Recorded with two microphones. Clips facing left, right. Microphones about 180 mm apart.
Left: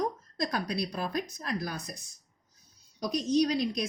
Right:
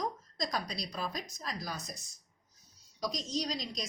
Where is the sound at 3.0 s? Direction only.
60° left (ahead or behind).